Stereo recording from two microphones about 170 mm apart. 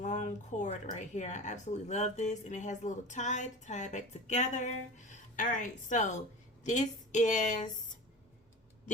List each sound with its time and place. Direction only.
0.0 s speech: 45° left (ahead or behind)